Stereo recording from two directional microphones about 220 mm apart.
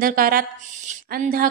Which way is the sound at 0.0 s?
40° right (ahead or behind).